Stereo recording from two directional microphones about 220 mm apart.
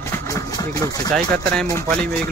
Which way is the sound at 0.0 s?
10° left (ahead or behind).